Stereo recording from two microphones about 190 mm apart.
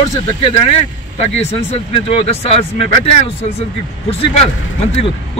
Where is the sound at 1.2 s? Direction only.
35° left (ahead or behind).